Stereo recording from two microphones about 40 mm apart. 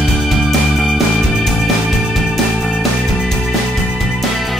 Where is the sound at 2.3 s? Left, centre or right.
Centre.